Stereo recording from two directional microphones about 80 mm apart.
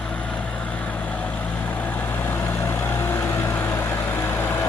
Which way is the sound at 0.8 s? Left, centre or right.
Centre.